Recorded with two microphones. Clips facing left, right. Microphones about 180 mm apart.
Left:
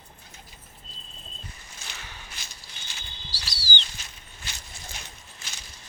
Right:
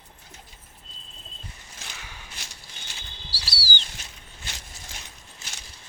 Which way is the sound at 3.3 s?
10° right (ahead or behind).